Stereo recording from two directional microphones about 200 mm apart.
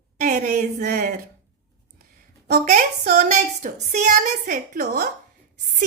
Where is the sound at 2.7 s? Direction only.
40° right (ahead or behind).